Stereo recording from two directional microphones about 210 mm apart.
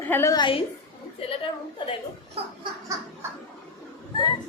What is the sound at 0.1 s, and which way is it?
Speech, 15° left (ahead or behind).